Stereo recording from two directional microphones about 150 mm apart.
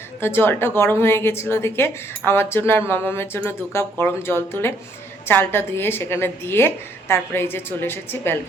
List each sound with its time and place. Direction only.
0.2 s a woman's voice: 15° left (ahead or behind)